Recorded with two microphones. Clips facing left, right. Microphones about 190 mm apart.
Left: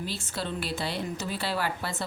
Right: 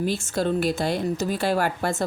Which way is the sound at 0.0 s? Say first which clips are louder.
Right 10 dB; 45° right (ahead or behind).